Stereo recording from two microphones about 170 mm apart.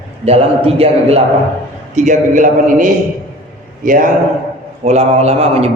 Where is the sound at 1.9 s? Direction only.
45° right (ahead or behind).